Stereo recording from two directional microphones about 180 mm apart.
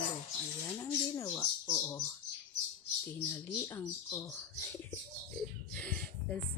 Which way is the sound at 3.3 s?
15° left (ahead or behind).